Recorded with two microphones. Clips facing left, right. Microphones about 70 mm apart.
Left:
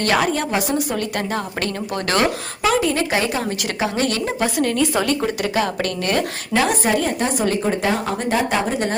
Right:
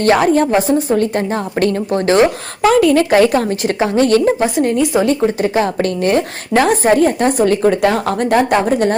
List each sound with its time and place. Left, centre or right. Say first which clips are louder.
0.0 s a woman's voice: right 7 dB; right
2.8 s a woman's voice: right 9 dB; right
4.4 s a woman's voice: right 5 dB; right
6.6 s speech: right 7 dB; right